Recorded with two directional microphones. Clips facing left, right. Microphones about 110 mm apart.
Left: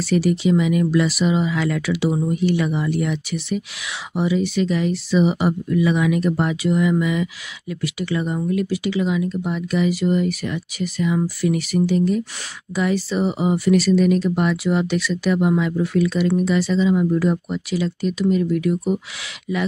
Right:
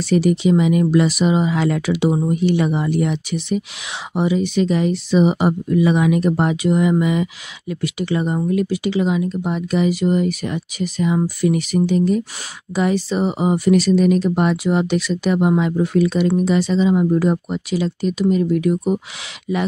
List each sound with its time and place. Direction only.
0.0 s speech: 20° right (ahead or behind)